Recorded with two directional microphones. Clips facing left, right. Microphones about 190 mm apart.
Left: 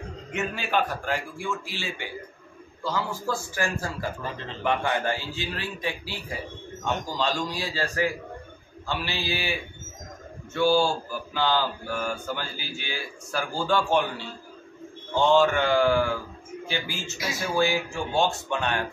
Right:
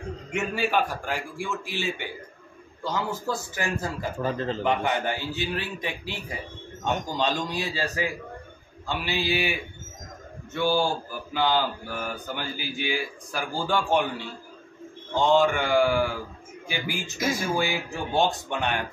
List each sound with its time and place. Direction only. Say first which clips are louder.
0.3 s mantra: right 2 dB; 10° right (ahead or behind)
2.8 s a man's voice: even; 20° right (ahead or behind)
8.8 s mantra: right 2 dB; 15° right (ahead or behind)